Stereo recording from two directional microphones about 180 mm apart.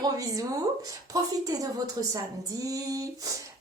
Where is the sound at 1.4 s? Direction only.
20° right (ahead or behind).